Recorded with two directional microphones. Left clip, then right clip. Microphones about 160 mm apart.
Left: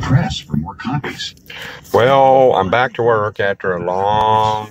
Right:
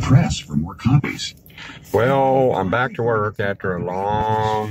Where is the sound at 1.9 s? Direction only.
10° left (ahead or behind).